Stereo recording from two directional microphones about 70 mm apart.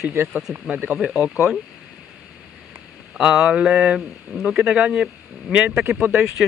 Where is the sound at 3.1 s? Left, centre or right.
Centre.